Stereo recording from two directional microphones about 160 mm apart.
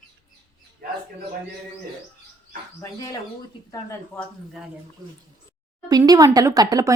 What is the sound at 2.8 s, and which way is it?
Speech, 20° left (ahead or behind).